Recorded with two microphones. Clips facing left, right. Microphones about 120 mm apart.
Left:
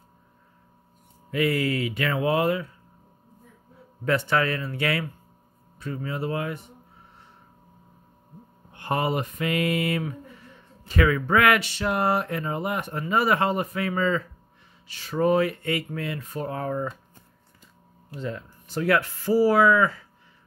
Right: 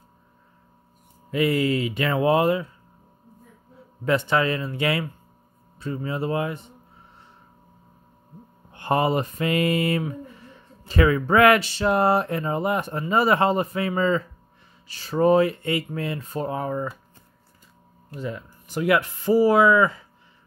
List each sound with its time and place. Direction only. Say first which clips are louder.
1.3 s speech: right 3 dB; 20° right (ahead or behind)
4.0 s speech: right 2 dB; 20° right (ahead or behind)
8.7 s speech: right 4 dB; 30° right (ahead or behind)
16.5 s speech: right 1 dB; 10° right (ahead or behind)
18.1 s speech: right 1 dB; 10° right (ahead or behind)